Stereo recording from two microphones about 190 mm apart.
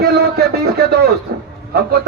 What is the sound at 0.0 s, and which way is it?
A man's voice, 55° right (ahead or behind).